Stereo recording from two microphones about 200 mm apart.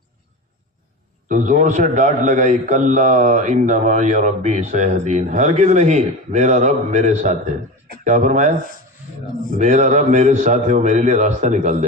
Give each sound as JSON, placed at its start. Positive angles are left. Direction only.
{"t": 1.3, "sound": "a man's voice", "side_deg": -40}
{"t": 9.6, "sound": "a man's voice", "side_deg": -35}